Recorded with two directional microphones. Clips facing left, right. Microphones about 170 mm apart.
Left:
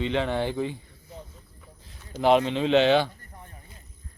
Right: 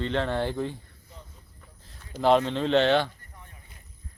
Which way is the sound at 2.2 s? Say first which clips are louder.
Left 1 dB; 10° left (ahead or behind).